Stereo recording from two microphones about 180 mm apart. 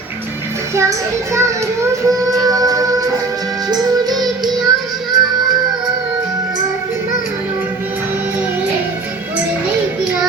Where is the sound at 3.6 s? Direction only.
20° right (ahead or behind).